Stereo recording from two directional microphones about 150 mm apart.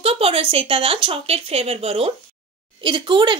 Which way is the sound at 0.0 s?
40° right (ahead or behind).